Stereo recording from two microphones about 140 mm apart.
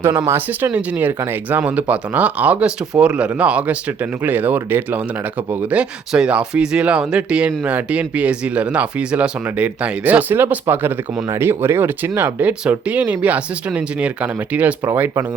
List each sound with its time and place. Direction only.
0.0 s speech: 25° right (ahead or behind)
0.3 s speech: 10° right (ahead or behind)